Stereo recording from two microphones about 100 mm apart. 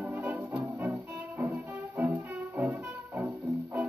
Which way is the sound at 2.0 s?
15° right (ahead or behind).